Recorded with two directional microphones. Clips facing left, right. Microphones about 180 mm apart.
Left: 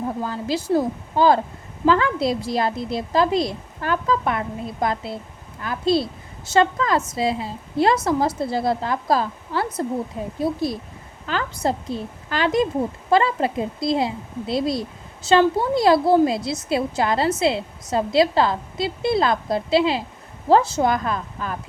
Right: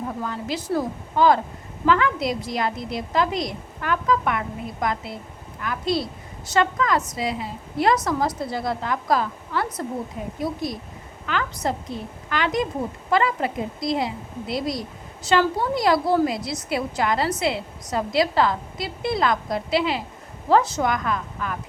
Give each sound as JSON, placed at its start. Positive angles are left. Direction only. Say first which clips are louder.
{"t": 0.2, "sound": "a woman's voice", "louder": "left 3 dB", "side_deg": 30}